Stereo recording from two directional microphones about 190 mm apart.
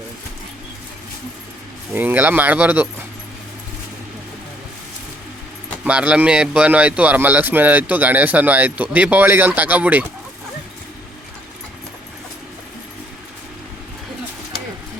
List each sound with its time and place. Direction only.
1.9 s a man's voice: 10° right (ahead or behind)
5.8 s a man's voice: 5° right (ahead or behind)